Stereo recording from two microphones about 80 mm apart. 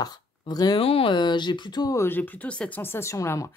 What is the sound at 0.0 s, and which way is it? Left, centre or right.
Speech, left.